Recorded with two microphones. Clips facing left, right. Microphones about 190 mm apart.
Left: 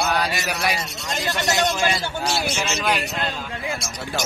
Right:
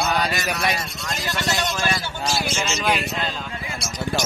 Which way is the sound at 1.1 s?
20° left (ahead or behind).